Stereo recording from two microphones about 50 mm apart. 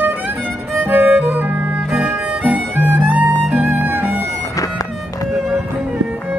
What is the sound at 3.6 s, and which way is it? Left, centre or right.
Violin, right.